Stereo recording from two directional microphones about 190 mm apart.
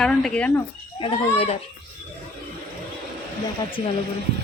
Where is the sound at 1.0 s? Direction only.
30° left (ahead or behind).